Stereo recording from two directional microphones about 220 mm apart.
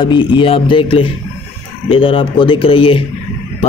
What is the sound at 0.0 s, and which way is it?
A man's voice, 20° left (ahead or behind).